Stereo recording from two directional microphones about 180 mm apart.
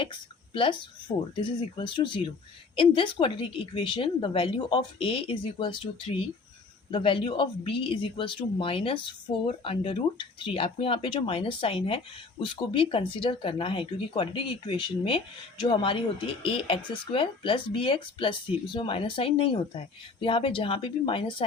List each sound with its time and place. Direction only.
0.0 s speech: 30° left (ahead or behind)